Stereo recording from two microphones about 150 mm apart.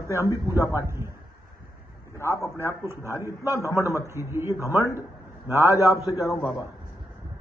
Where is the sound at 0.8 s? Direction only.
20° right (ahead or behind).